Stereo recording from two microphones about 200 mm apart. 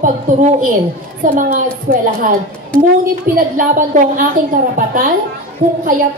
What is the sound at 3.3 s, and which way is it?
A woman's voice, 40° right (ahead or behind).